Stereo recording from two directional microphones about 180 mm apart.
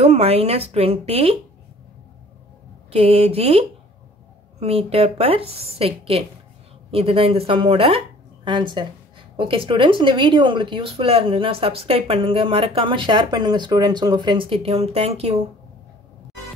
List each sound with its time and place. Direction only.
0.0 s a woman's voice: 35° right (ahead or behind)
2.9 s a woman's voice: 30° right (ahead or behind)